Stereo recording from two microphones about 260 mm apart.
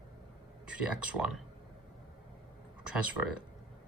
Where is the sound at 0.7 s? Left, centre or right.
Centre.